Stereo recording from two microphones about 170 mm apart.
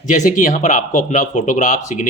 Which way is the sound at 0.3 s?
50° left (ahead or behind).